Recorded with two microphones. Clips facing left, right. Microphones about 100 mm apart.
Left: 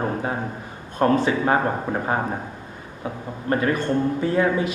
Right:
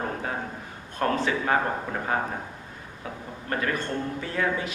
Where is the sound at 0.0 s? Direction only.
25° left (ahead or behind).